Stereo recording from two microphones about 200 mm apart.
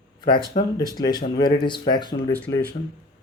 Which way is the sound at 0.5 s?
30° left (ahead or behind).